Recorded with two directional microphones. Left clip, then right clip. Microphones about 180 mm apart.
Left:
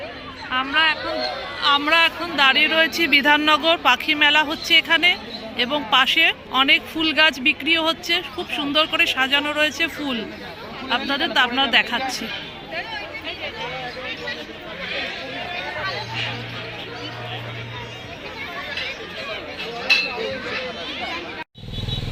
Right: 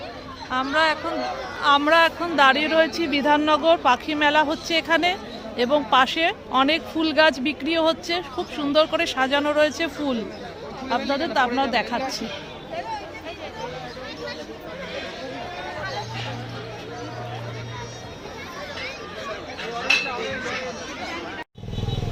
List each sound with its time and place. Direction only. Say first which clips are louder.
0.5 s speech: left 2 dB; 75° right (ahead or behind)
1.8 s speech: even; 40° right (ahead or behind); by 12.2 s 20° right (ahead or behind)